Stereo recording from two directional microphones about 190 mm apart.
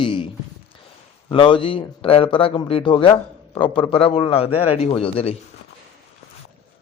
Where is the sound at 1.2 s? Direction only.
25° left (ahead or behind).